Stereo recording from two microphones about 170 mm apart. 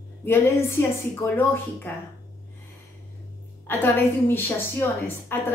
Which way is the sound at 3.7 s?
15° left (ahead or behind).